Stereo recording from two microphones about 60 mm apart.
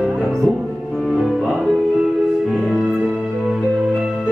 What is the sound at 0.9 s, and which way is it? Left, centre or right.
Music, centre.